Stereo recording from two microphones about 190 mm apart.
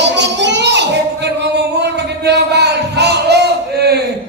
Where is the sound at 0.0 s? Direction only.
65° right (ahead or behind).